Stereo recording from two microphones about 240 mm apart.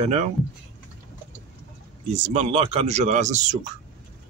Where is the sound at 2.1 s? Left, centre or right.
Right.